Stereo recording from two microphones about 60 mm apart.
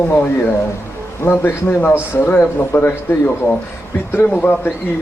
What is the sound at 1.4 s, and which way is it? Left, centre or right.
A man's voice, left.